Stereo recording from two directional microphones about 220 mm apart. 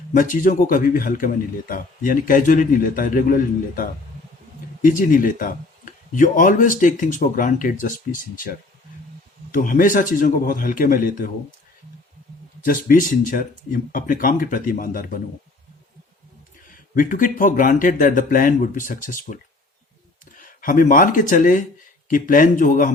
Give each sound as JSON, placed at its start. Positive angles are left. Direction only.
{"t": 0.1, "sound": "a man's voice", "side_deg": 35}
{"t": 9.5, "sound": "a man's voice", "side_deg": 40}
{"t": 12.6, "sound": "a man's voice", "side_deg": 40}
{"t": 16.6, "sound": "a man's voice", "side_deg": 40}